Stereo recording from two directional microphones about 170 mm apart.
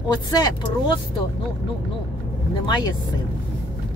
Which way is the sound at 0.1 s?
25° left (ahead or behind).